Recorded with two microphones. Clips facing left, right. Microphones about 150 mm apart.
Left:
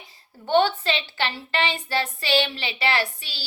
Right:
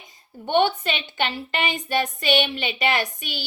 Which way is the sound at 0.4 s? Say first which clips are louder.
Even; 15° right (ahead or behind).